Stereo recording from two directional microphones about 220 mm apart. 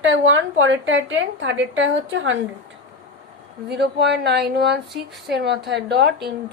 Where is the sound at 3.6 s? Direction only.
50° right (ahead or behind).